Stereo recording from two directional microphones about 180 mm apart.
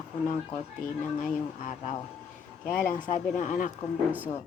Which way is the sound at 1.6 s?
45° left (ahead or behind).